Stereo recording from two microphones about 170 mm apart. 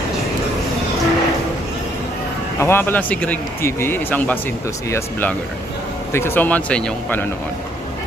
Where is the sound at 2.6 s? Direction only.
15° left (ahead or behind).